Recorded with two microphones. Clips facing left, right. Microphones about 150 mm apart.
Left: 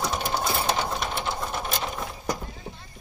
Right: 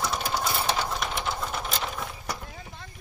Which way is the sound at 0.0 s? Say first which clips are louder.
Left 1 dB; 20° left (ahead or behind).